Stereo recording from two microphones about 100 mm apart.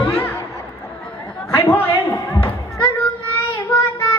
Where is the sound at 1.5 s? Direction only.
25° left (ahead or behind).